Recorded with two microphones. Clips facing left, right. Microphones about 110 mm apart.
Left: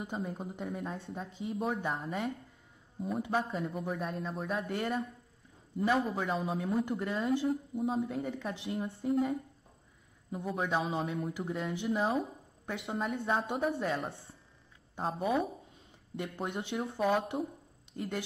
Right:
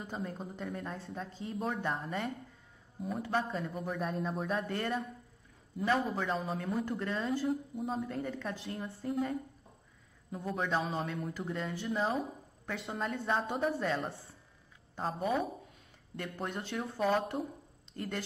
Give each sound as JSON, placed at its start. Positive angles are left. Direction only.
{"t": 0.1, "sound": "speech", "side_deg": 5}
{"t": 11.3, "sound": "speech", "side_deg": 10}
{"t": 12.1, "sound": "a sound", "side_deg": 0}
{"t": 12.8, "sound": "speech", "side_deg": 0}
{"t": 16.7, "sound": "speech", "side_deg": 15}
{"t": 17.9, "sound": "speech", "side_deg": 0}